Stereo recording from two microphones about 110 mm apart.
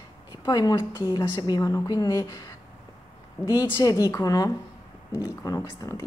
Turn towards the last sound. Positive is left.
turn(degrees=30)  # may be behind; listen again after turning